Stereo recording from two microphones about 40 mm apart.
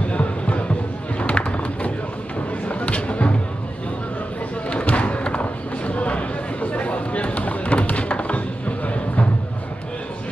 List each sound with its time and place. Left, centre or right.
0.1 s music: left
4.6 s music: left